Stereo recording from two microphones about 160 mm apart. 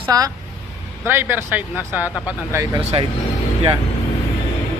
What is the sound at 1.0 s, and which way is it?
Speech, 15° right (ahead or behind).